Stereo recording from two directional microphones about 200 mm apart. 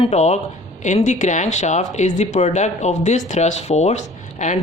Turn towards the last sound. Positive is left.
turn(degrees=35)  # may be behind; listen again after turning